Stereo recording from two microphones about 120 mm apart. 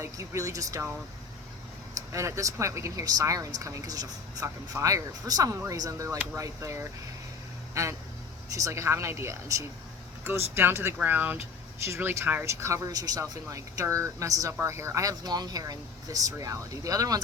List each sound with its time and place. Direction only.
0.0 s speech: 25° right (ahead or behind)
2.0 s speech: 25° right (ahead or behind)